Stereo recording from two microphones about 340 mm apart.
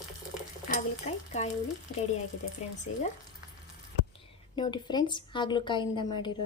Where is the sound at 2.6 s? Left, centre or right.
Centre.